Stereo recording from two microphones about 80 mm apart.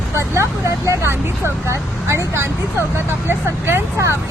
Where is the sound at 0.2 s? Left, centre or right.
Right.